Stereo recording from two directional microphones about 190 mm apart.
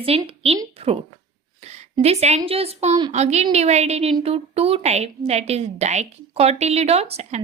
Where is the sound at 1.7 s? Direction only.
35° right (ahead or behind).